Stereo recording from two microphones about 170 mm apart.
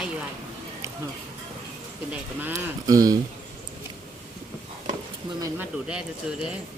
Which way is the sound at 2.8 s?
20° right (ahead or behind).